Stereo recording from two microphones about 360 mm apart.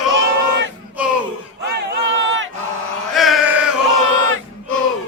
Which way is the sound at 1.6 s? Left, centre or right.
Right.